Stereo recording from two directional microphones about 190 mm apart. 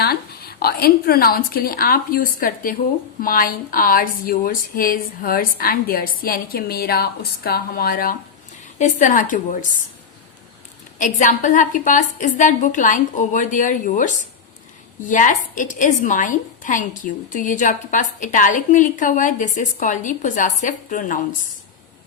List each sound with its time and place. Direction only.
0.0 s a woman's voice: 55° left (ahead or behind)
10.9 s a woman's voice: 45° left (ahead or behind)